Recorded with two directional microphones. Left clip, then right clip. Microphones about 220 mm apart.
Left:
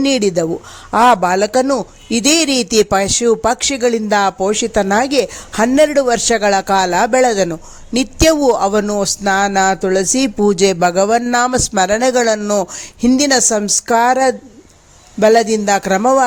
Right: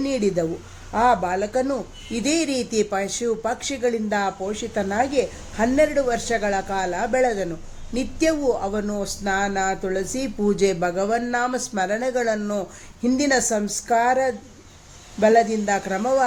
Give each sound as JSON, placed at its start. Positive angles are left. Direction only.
{"t": 0.0, "sound": "a man's voice", "side_deg": 40}